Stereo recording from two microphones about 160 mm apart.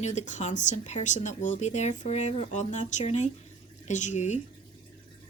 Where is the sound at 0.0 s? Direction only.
45° left (ahead or behind).